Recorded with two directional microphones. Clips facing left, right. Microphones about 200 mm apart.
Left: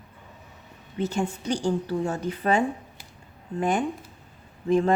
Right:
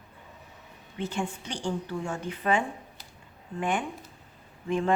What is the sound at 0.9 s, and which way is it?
A woman's voice, 40° left (ahead or behind).